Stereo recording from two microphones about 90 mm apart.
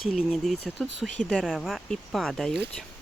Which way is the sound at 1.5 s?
Centre (ahead or behind).